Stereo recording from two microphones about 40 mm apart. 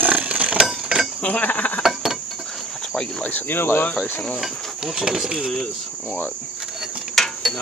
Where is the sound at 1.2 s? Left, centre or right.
Left.